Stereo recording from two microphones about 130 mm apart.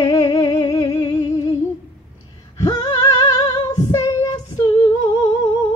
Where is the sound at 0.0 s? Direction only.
35° left (ahead or behind).